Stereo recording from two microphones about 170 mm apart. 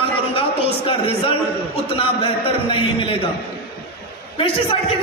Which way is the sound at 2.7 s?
30° left (ahead or behind).